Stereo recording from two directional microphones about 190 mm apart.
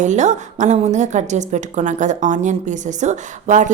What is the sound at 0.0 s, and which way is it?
A woman's voice, 40° right (ahead or behind).